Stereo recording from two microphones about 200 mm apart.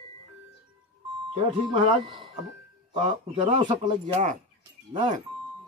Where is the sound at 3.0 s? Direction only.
35° right (ahead or behind).